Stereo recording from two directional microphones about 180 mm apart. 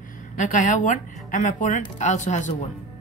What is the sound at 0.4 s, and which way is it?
Speech, 45° left (ahead or behind).